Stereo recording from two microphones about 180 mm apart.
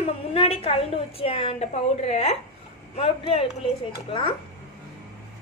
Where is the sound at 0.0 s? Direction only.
35° left (ahead or behind).